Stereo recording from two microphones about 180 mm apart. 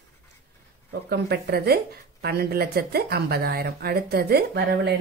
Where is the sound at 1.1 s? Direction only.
65° right (ahead or behind).